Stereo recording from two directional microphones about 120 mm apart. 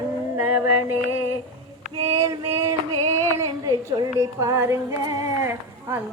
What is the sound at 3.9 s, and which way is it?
Female singing, 25° right (ahead or behind).